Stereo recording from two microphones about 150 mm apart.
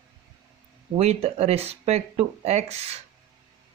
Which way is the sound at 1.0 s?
45° right (ahead or behind).